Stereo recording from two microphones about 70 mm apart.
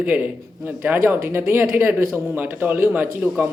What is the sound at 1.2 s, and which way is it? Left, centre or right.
Speech, right.